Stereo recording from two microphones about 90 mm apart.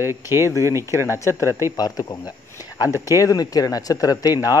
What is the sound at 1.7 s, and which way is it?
Speech, 45° left (ahead or behind).